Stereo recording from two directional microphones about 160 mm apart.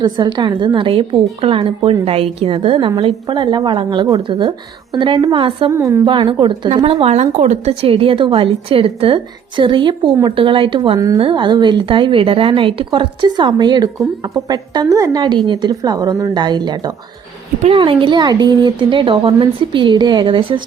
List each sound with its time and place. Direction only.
0.0 s a woman's voice: 25° right (ahead or behind)
5.7 s a woman's voice: 15° right (ahead or behind)
6.1 s a woman's voice: 30° right (ahead or behind)